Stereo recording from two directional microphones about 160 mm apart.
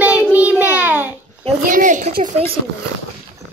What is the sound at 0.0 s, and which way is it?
Child singing, 10° right (ahead or behind).